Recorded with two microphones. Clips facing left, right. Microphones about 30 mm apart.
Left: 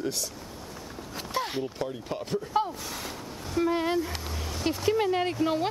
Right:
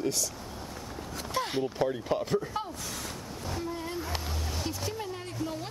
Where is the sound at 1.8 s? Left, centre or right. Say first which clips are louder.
Right 4 dB; centre.